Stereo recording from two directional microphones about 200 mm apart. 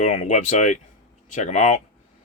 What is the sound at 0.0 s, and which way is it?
Speech, 35° left (ahead or behind).